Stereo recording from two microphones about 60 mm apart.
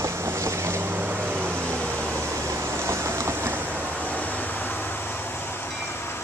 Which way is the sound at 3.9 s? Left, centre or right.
Left.